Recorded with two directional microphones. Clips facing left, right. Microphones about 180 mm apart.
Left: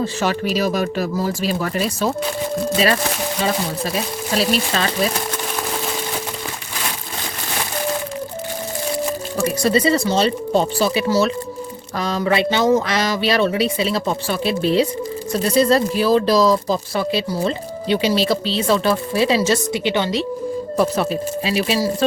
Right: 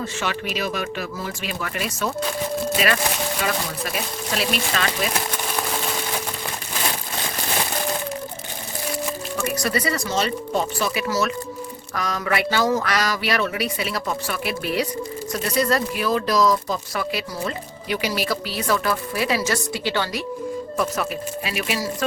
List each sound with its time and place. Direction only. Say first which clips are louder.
0.0 s speech: left 6 dB; 40° left (ahead or behind)
9.4 s speech: left 7 dB; 30° left (ahead or behind)